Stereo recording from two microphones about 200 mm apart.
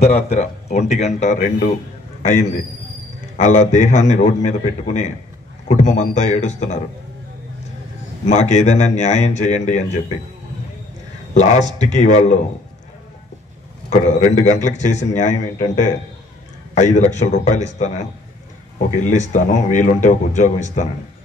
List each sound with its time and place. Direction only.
0.0 s a man's voice: 30° left (ahead or behind)
8.3 s a man's voice: 35° left (ahead or behind)
11.3 s a man's voice: 35° left (ahead or behind)
13.8 s a man's voice: 35° left (ahead or behind)